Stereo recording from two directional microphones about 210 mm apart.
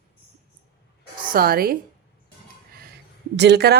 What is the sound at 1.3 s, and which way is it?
Speech, 45° right (ahead or behind).